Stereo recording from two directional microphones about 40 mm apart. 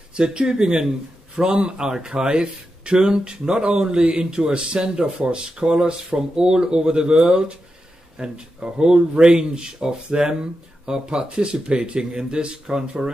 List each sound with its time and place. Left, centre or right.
0.1 s speech: right